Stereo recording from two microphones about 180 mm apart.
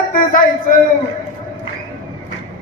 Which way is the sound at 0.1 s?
50° left (ahead or behind).